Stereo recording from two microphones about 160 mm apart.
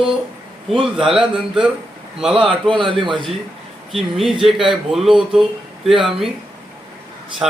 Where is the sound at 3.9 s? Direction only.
Centre (ahead or behind).